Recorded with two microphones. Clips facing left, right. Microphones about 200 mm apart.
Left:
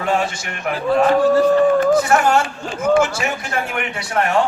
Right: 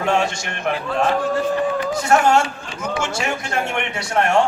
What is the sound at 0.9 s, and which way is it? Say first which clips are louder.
Speech: left 8 dB; 40° left (ahead or behind).